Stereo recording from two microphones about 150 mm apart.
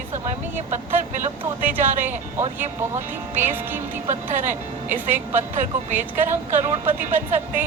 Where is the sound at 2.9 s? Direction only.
15° right (ahead or behind).